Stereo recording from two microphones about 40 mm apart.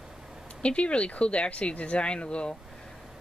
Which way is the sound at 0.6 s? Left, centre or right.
Left.